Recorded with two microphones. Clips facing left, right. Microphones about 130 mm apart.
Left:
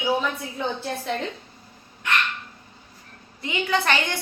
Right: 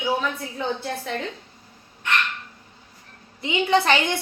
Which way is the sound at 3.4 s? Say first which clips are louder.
Right 4 dB; 20° right (ahead or behind).